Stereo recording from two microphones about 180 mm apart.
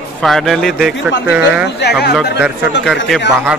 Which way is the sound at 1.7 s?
70° left (ahead or behind).